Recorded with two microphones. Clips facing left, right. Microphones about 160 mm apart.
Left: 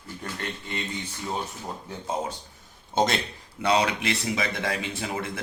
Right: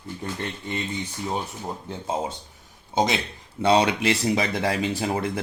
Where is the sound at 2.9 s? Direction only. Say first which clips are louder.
Right 1 dB; 10° right (ahead or behind).